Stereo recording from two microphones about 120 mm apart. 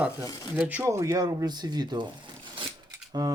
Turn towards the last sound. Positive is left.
turn(degrees=-35)  # may be behind; listen again after turning